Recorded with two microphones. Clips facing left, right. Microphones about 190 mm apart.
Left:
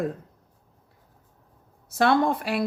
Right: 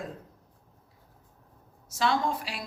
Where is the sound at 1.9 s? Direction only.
60° left (ahead or behind).